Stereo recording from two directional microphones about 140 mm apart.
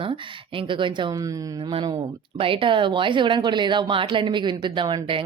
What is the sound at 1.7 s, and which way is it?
Speech, 35° right (ahead or behind).